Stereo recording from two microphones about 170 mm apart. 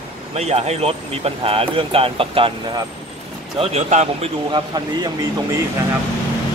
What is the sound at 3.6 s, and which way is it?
Speech, 40° right (ahead or behind).